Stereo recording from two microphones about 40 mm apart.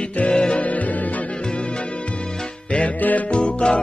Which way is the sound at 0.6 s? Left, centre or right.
Left.